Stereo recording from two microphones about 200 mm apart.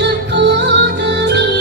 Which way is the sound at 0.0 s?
60° right (ahead or behind).